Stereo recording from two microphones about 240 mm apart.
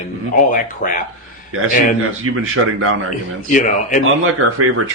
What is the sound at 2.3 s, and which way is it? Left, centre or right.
Speech, right.